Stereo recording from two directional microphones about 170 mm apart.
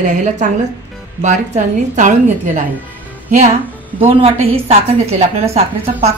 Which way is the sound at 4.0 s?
35° right (ahead or behind).